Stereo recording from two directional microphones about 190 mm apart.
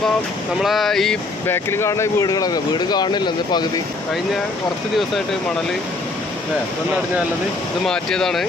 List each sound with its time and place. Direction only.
0.6 s speech: centre (ahead or behind)
1.5 s speech: 10° left (ahead or behind)
7.9 s speech: 5° left (ahead or behind)